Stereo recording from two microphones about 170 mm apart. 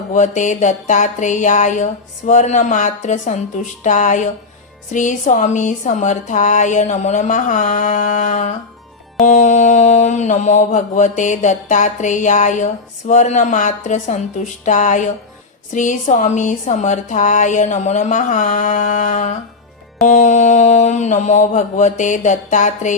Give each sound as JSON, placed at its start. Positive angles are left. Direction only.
{"t": 0.1, "sound": "a woman's voice", "side_deg": 45}